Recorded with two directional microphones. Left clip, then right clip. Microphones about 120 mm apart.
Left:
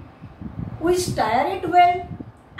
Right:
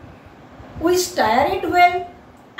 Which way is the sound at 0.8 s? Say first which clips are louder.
Right 3 dB; 15° right (ahead or behind).